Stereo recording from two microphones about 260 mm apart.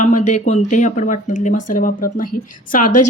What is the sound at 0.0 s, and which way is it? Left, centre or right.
A woman's voice, left.